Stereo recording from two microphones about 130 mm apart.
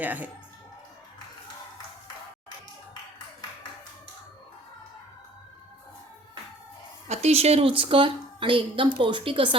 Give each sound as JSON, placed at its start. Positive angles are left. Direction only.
{"t": 0.0, "sound": "speech", "side_deg": -15}
{"t": 7.1, "sound": "a woman's voice", "side_deg": -55}